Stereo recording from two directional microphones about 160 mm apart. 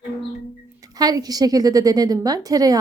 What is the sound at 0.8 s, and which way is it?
Speech, 25° right (ahead or behind).